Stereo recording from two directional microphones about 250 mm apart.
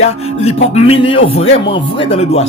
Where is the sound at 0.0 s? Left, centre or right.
Left.